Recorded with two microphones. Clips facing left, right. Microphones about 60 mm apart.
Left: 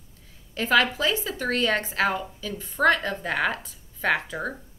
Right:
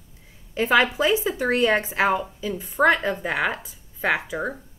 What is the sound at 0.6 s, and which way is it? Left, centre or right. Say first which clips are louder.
A woman's voice: right 3 dB; centre.